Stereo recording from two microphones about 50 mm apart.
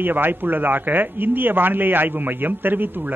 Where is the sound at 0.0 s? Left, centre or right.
Right.